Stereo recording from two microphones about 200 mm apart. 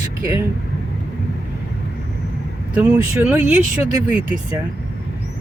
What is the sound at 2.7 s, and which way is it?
Speech, 5° right (ahead or behind).